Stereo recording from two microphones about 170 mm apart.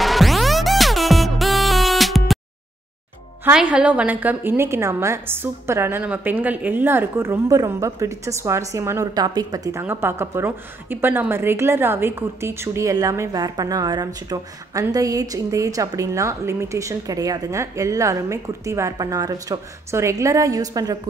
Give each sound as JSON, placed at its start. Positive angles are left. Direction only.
{"t": 0.0, "sound": "music", "side_deg": 0}
{"t": 3.5, "sound": "a woman's voice", "side_deg": -5}